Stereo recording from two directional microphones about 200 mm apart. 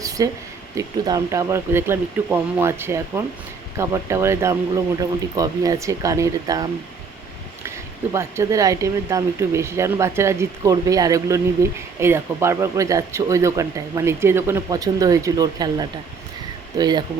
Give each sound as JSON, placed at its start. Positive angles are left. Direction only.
{"t": 0.0, "sound": "a sound", "side_deg": -15}
{"t": 0.8, "sound": "speech", "side_deg": -15}
{"t": 8.1, "sound": "speech", "side_deg": -15}